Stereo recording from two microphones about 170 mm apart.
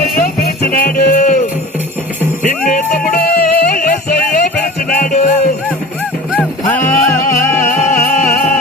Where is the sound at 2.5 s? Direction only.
55° left (ahead or behind).